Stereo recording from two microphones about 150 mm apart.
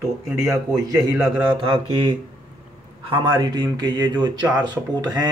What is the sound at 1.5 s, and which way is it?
Mantra, 35° right (ahead or behind).